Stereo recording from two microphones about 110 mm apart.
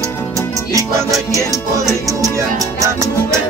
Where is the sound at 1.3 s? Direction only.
30° left (ahead or behind).